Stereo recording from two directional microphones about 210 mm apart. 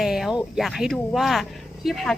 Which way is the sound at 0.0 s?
Centre (ahead or behind).